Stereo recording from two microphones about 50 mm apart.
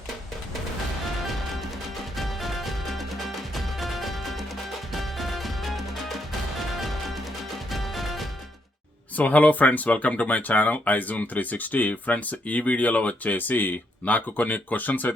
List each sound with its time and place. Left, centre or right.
2.1 s music: centre
9.1 s speech: left
13.3 s speech: left